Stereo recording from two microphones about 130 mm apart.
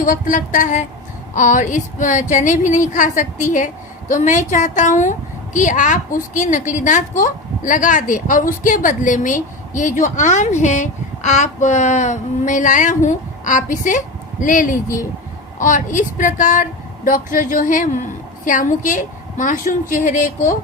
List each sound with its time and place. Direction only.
0.0 s a woman's voice: 90° left